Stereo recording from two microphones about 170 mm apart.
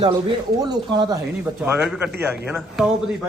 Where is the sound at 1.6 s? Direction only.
5° right (ahead or behind).